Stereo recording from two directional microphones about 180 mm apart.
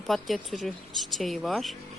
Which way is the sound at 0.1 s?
Centre (ahead or behind).